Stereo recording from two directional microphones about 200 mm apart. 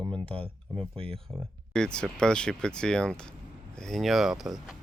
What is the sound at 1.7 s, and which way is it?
Speech, 5° left (ahead or behind).